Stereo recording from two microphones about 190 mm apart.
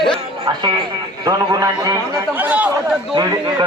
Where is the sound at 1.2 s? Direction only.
20° right (ahead or behind).